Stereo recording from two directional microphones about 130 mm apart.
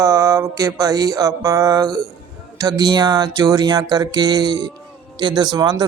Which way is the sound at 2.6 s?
30° right (ahead or behind).